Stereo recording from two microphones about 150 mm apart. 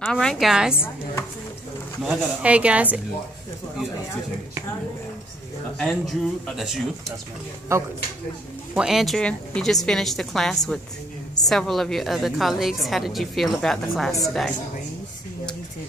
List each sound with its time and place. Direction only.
0.0 s a woman's voice: 5° left (ahead or behind)
2.0 s speech: 10° right (ahead or behind)
5.8 s a woman's voice: 5° left (ahead or behind)
7.7 s speech: 20° right (ahead or behind)
8.7 s a woman's voice: 5° right (ahead or behind)